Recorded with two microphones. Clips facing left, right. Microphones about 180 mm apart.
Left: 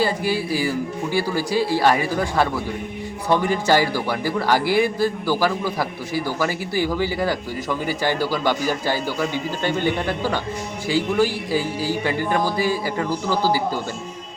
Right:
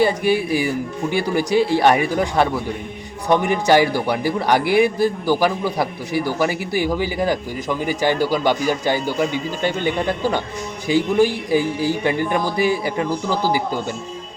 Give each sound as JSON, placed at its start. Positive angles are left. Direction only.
{"t": 0.0, "sound": "speech", "side_deg": -20}